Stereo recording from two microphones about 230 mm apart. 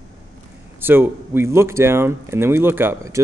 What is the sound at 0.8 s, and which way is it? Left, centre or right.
Speech, centre.